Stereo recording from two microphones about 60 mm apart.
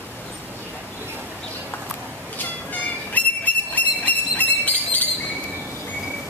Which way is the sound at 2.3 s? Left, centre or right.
Left.